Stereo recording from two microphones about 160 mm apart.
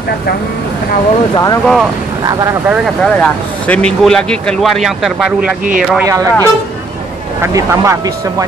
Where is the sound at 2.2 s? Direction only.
25° right (ahead or behind).